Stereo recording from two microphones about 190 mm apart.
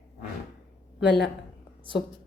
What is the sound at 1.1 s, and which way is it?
Speech, 60° left (ahead or behind).